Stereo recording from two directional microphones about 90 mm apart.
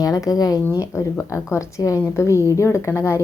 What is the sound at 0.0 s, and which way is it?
A woman's voice, 45° left (ahead or behind).